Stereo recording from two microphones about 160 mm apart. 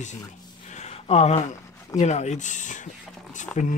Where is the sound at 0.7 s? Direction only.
45° left (ahead or behind).